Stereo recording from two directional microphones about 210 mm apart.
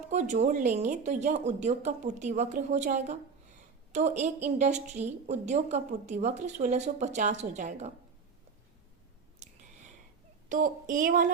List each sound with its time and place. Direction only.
0.1 s a woman's voice: 35° right (ahead or behind)
10.5 s a woman's voice: 40° right (ahead or behind)